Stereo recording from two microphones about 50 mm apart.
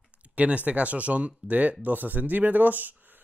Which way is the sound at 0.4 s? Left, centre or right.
Right.